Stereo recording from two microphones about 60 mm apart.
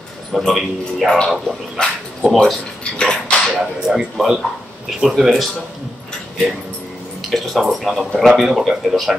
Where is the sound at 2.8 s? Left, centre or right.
Centre.